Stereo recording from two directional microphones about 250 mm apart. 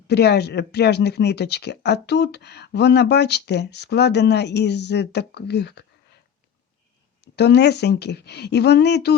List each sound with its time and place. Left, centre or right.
0.1 s speech: left
7.3 s speech: left